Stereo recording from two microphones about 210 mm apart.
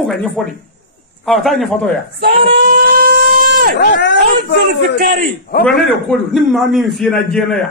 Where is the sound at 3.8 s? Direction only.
55° left (ahead or behind).